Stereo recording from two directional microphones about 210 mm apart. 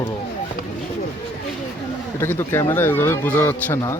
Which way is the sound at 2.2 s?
10° left (ahead or behind).